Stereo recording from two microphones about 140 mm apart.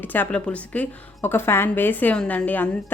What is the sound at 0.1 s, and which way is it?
A woman's voice, 10° left (ahead or behind).